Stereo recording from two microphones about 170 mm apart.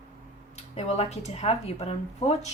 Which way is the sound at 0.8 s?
40° left (ahead or behind).